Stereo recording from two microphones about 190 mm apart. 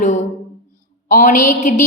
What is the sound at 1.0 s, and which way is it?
Speech, 45° left (ahead or behind).